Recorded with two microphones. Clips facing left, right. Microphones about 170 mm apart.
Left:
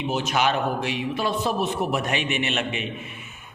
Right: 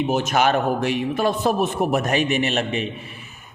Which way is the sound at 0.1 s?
45° right (ahead or behind).